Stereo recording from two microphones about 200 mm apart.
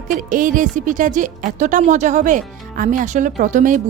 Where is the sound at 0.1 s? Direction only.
40° right (ahead or behind).